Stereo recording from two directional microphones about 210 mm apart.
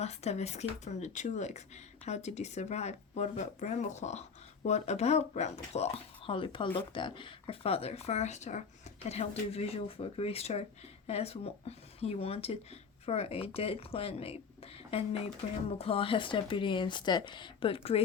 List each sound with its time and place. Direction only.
0.0 s speech: 30° left (ahead or behind)